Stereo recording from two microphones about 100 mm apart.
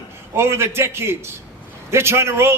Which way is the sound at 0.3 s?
25° right (ahead or behind).